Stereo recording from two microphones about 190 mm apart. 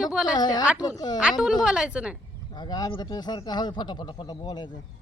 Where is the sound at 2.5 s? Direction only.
20° left (ahead or behind).